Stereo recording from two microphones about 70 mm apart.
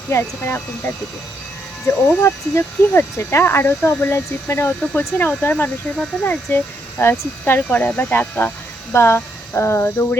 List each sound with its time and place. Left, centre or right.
0.1 s speech: left
8.9 s speech: left